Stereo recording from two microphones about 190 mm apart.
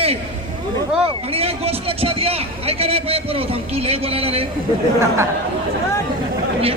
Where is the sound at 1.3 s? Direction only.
30° right (ahead or behind).